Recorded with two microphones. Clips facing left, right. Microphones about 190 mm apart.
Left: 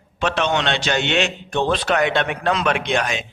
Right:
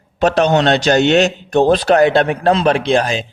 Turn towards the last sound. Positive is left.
turn(degrees=-30)  # may be behind; listen again after turning